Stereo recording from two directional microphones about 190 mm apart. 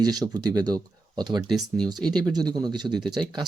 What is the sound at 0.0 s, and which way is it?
Speech, 20° right (ahead or behind).